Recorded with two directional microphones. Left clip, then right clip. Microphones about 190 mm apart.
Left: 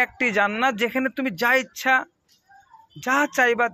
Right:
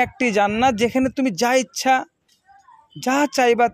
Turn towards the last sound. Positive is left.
turn(degrees=-60)  # may be behind; listen again after turning